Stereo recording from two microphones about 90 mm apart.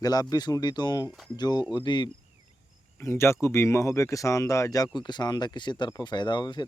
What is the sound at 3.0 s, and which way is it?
Speech, 30° left (ahead or behind).